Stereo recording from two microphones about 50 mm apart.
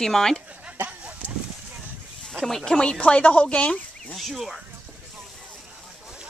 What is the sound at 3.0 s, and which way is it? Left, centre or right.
Speech, left.